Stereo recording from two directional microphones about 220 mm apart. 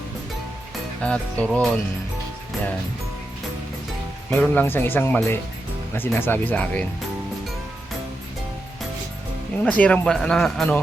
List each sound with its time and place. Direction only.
1.0 s speech: 5° left (ahead or behind)
4.3 s speech: 10° left (ahead or behind)
9.6 s speech: 5° left (ahead or behind)